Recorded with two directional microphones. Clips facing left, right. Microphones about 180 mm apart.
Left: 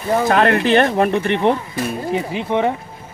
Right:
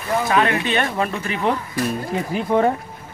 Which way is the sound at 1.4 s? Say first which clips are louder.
Left 3 dB; 20° left (ahead or behind).